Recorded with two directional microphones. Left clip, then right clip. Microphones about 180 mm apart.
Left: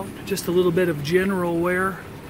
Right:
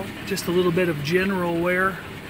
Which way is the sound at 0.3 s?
Centre (ahead or behind).